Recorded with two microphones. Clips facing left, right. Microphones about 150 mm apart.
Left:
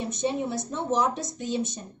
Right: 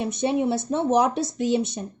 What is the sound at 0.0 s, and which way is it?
A woman's voice, 65° right (ahead or behind).